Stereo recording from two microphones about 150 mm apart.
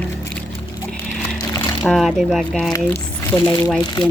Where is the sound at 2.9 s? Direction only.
15° left (ahead or behind).